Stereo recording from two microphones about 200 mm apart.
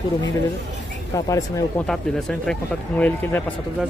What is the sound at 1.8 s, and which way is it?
Speech, centre (ahead or behind).